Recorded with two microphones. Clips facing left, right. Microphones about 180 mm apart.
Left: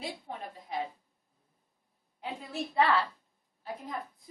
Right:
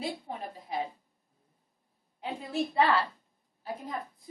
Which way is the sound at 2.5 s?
Centre (ahead or behind).